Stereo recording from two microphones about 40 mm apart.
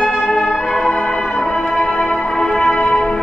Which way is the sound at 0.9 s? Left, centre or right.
Centre.